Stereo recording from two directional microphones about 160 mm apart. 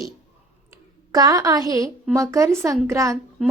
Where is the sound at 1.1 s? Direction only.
20° right (ahead or behind).